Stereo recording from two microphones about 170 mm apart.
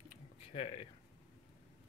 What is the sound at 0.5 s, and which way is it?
Speech, 35° left (ahead or behind).